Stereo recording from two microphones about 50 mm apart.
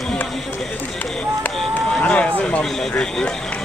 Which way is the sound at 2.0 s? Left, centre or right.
Left.